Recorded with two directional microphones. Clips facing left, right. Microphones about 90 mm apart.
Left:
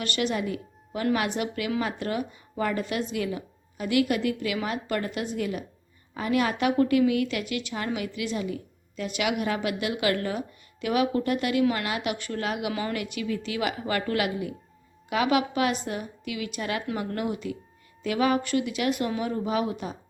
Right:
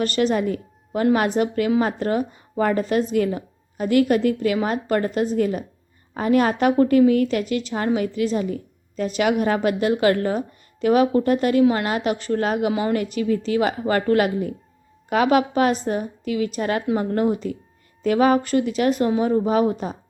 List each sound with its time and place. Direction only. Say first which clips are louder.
0.0 s a woman's voice: right 8 dB; 40° right (ahead or behind)
12.7 s a woman's voice: right 8 dB; 25° right (ahead or behind)
13.0 s a woman's voice: right 8 dB; 35° right (ahead or behind)